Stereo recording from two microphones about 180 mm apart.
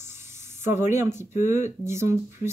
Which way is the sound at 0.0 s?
15° right (ahead or behind).